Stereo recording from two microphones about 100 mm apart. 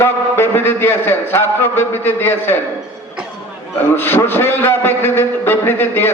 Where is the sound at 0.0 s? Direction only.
25° left (ahead or behind).